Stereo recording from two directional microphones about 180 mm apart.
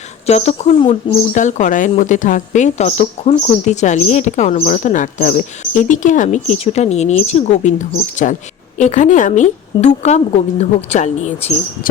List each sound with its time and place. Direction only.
0.3 s speech: 35° left (ahead or behind)